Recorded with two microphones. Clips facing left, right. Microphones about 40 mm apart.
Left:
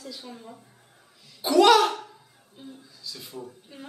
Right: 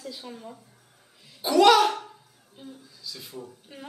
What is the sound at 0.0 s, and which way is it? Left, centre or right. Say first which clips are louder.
Speech: right 1 dB; right.